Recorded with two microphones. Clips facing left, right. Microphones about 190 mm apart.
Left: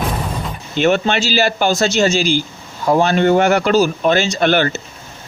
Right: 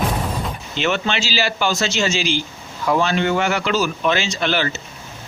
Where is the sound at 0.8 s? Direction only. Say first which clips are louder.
Left 7 dB; 45° left (ahead or behind).